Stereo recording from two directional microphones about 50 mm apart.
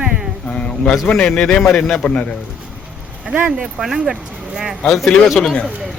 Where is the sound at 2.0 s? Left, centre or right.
Left.